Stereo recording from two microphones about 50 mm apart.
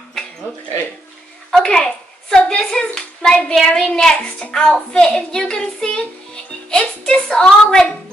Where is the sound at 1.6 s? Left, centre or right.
Centre.